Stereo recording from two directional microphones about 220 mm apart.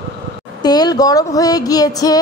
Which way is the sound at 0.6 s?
20° left (ahead or behind).